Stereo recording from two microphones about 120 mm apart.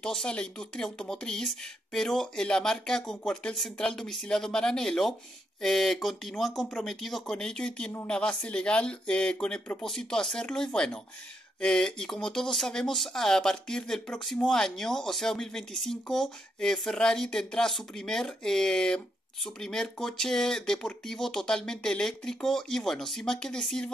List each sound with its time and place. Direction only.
0.0 s speech: 5° left (ahead or behind)